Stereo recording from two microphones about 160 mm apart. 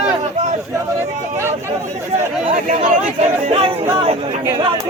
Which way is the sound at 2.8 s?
40° right (ahead or behind).